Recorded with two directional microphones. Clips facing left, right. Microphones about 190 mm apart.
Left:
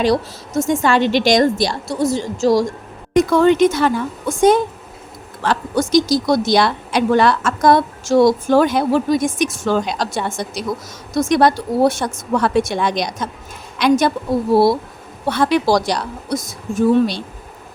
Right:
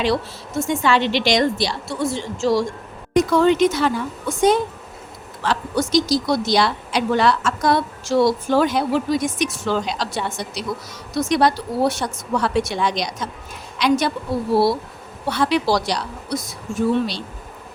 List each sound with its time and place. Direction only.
0.0 s speech: 40° left (ahead or behind)